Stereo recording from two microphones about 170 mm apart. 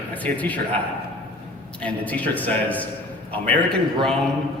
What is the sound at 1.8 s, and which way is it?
A man's voice, 10° left (ahead or behind).